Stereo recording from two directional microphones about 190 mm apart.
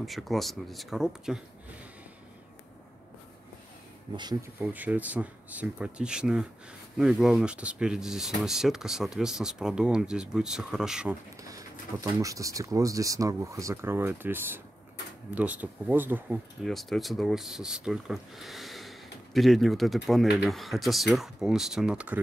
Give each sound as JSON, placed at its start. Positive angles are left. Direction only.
{"t": 0.0, "sound": "speech", "side_deg": 0}
{"t": 4.2, "sound": "speech", "side_deg": -15}
{"t": 12.0, "sound": "speech", "side_deg": -15}
{"t": 16.6, "sound": "speech", "side_deg": 0}